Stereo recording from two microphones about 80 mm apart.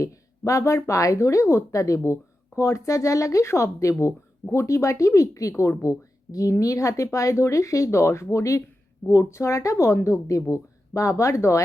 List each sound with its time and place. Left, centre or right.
0.0 s speech: left